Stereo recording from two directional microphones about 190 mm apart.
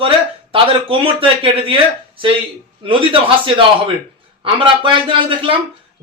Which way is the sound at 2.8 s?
25° right (ahead or behind).